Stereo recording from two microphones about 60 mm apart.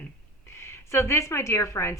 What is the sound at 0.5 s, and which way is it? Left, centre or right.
Speech, left.